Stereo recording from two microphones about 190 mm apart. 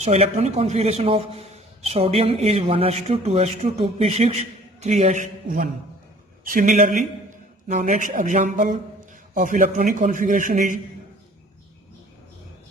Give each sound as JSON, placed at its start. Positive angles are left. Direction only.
{"t": 0.0, "sound": "a man's voice", "side_deg": -35}